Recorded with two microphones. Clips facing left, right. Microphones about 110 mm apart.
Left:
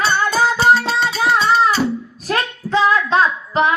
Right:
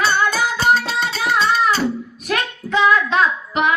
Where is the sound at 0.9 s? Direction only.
30° left (ahead or behind).